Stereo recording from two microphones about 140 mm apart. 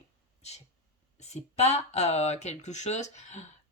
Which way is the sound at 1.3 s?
50° left (ahead or behind).